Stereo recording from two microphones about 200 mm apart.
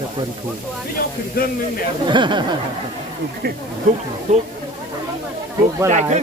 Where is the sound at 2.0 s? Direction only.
25° right (ahead or behind).